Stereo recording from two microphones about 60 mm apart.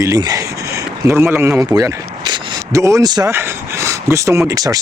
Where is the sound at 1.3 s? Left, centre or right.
Right.